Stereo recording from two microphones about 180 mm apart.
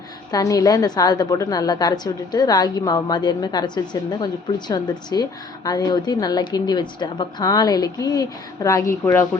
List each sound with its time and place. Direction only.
0.3 s a woman's voice: 20° left (ahead or behind)